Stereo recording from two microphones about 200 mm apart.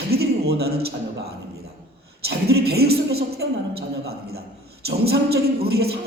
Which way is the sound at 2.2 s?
55° right (ahead or behind).